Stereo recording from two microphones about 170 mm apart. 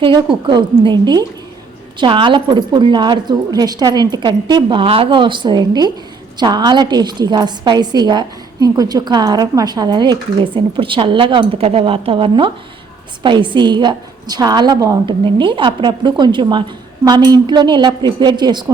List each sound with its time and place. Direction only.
0.4 s a woman's voice: 25° right (ahead or behind)